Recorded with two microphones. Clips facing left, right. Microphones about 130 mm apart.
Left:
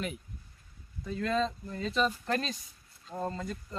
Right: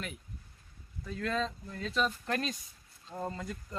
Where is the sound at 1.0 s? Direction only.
Centre (ahead or behind).